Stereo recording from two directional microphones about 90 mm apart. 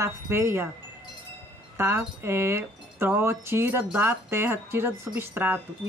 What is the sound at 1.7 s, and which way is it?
Speech, 25° right (ahead or behind).